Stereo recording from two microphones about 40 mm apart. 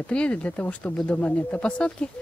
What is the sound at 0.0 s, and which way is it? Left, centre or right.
Speech, left.